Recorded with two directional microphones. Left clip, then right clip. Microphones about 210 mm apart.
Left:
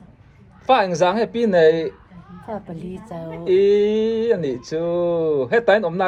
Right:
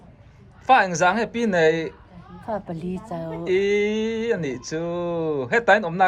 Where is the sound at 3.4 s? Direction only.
5° left (ahead or behind).